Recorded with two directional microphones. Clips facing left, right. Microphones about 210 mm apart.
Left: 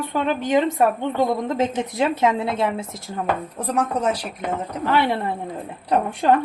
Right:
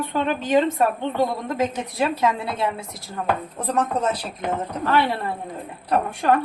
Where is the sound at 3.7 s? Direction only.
10° left (ahead or behind).